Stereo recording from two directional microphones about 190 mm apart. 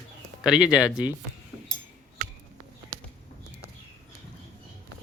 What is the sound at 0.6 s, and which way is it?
Speech, 20° left (ahead or behind).